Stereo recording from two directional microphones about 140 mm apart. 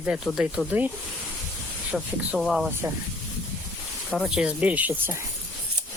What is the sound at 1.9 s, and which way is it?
Speech, centre (ahead or behind).